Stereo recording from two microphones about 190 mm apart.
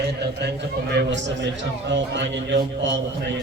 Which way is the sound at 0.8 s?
65° right (ahead or behind).